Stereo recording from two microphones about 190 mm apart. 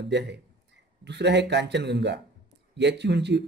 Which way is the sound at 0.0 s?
65° right (ahead or behind).